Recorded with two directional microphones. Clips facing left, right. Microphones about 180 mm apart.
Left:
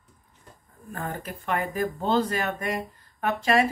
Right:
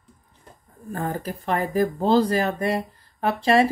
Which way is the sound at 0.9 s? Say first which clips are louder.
Right 6 dB; 35° right (ahead or behind).